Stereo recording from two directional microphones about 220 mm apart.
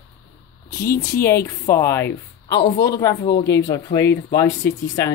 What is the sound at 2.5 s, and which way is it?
Speech, 50° left (ahead or behind).